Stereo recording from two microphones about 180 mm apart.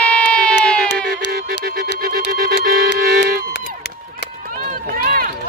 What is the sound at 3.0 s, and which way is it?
Music, 50° right (ahead or behind).